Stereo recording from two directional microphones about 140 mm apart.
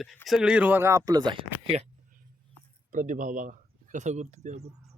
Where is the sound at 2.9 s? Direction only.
70° right (ahead or behind).